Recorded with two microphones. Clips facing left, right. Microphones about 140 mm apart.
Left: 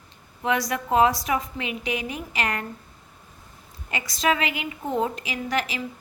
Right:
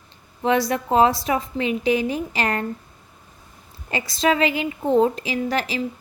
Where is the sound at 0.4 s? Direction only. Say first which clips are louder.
Right 5 dB; 30° right (ahead or behind).